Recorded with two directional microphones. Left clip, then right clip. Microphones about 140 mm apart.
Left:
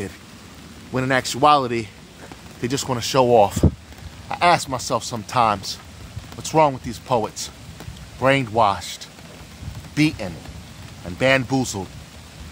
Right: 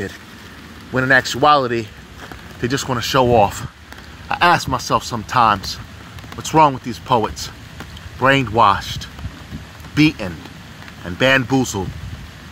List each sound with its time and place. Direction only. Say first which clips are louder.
0.9 s speech: right 6 dB; 15° left (ahead or behind)
4.3 s speech: right 3 dB; centre (ahead or behind)